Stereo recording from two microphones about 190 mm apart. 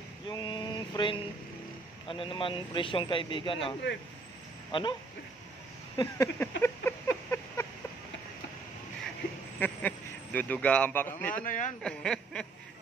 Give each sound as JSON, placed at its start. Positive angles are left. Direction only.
{"t": 0.3, "sound": "a sound", "side_deg": 25}
{"t": 2.0, "sound": "a man's voice", "side_deg": 25}
{"t": 5.9, "sound": "a sound", "side_deg": 15}
{"t": 9.6, "sound": "speech", "side_deg": 10}
{"t": 11.4, "sound": "speech", "side_deg": 45}
{"t": 11.8, "sound": "speech", "side_deg": 5}